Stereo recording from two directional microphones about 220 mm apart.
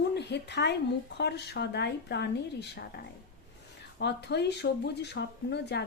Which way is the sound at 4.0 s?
50° left (ahead or behind).